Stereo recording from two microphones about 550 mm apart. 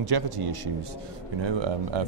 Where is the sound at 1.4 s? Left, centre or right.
Right.